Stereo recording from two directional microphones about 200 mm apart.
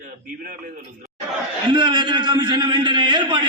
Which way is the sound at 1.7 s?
20° right (ahead or behind).